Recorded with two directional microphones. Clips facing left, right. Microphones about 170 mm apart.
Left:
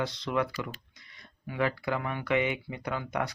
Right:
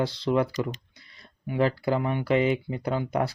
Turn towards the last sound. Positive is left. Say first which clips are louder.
# right 6 dB
turn(degrees=-30)  # may be behind; listen again after turning